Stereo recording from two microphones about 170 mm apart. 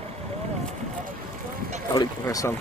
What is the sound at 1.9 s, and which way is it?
Speech, 20° left (ahead or behind).